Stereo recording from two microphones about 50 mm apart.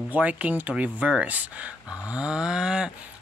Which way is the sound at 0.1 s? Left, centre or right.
Right.